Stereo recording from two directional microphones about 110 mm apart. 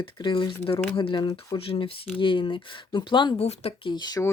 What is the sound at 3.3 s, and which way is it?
Speech, 70° left (ahead or behind).